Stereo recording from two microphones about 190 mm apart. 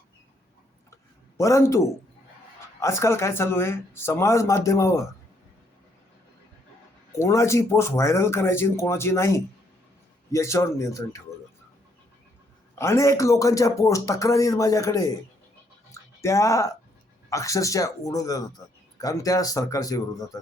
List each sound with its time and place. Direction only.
1.4 s a man's voice: 15° left (ahead or behind)
7.2 s a man's voice: 15° left (ahead or behind)
12.7 s a man's voice: 15° left (ahead or behind)
16.2 s a man's voice: 15° left (ahead or behind)